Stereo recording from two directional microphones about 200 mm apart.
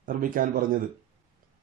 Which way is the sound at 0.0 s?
45° right (ahead or behind).